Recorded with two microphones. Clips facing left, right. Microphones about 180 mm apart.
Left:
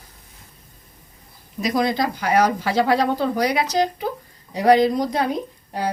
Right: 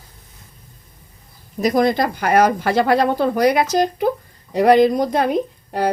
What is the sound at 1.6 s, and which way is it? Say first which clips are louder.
Speech: right 4 dB; 50° right (ahead or behind).